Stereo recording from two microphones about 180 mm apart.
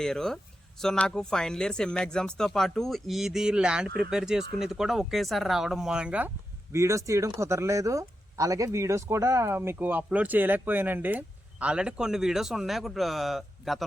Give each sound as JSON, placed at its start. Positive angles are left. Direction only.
{"t": 0.0, "sound": "speech", "side_deg": 5}